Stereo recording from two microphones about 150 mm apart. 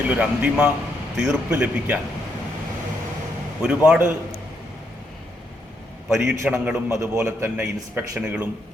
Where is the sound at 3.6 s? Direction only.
10° right (ahead or behind).